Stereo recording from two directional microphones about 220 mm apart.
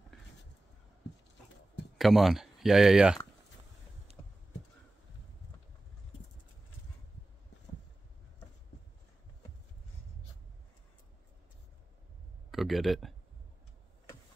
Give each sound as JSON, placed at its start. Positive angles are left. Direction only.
{"t": 2.0, "sound": "speech", "side_deg": 0}
{"t": 4.2, "sound": "a sound", "side_deg": 15}
{"t": 12.4, "sound": "speech", "side_deg": 0}